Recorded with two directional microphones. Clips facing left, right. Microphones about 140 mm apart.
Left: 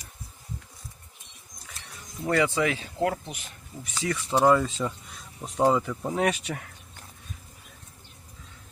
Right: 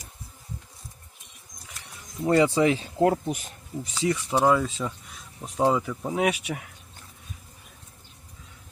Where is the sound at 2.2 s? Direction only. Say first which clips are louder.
Right 4 dB; 25° right (ahead or behind).